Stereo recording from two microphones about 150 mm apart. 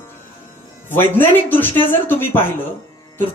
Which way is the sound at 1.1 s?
15° left (ahead or behind).